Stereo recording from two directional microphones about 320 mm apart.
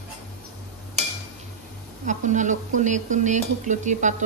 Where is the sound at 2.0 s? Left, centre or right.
Right.